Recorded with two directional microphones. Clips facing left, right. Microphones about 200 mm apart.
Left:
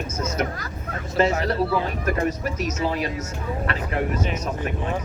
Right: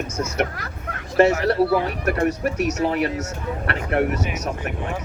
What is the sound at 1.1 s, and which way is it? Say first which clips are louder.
Speech: right 5 dB; 65° right (ahead or behind).